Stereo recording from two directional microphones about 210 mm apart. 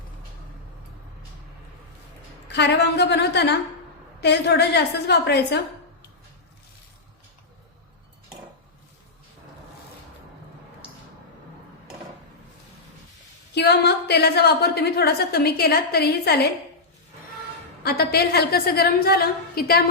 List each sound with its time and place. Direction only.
2.5 s a woman's voice: 55° left (ahead or behind)
13.5 s a woman's voice: 50° left (ahead or behind)
17.8 s a woman's voice: 50° left (ahead or behind)